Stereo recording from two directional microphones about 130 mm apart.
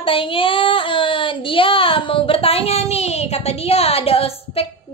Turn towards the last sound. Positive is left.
turn(degrees=50)  # may be behind; listen again after turning